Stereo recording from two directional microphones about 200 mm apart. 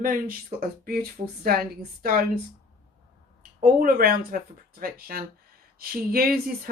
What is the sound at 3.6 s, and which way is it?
Speech, 45° right (ahead or behind).